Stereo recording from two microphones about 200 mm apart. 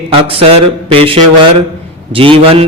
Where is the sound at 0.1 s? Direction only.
30° right (ahead or behind).